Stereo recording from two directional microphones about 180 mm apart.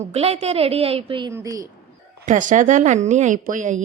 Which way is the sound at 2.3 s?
45° right (ahead or behind).